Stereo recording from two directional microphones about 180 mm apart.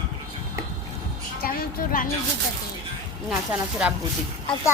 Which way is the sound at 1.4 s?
55° left (ahead or behind).